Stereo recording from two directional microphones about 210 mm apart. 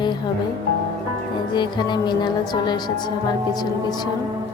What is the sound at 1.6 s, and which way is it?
Speech, 20° left (ahead or behind).